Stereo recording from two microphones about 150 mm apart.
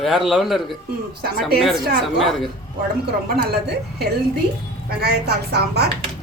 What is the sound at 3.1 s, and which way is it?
A woman's voice, 90° right.